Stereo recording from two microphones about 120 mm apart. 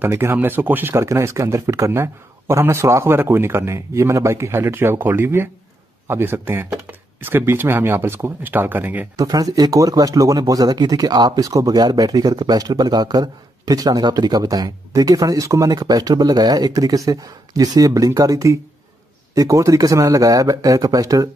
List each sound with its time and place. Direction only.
0.0 s speech: 20° right (ahead or behind)
9.1 s speech: 30° right (ahead or behind)